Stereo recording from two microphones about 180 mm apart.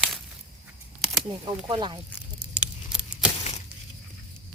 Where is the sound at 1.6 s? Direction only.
25° right (ahead or behind).